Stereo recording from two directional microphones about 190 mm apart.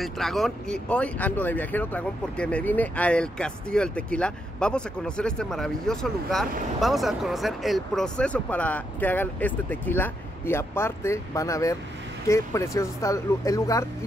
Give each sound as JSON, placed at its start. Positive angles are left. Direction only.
{"t": 0.0, "sound": "speech", "side_deg": 0}